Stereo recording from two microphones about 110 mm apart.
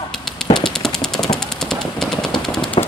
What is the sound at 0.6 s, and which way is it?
Machine gun, 5° left (ahead or behind).